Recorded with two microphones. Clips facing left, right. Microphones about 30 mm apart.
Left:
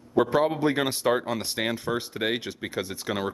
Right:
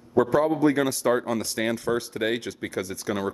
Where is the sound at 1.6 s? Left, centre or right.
Centre.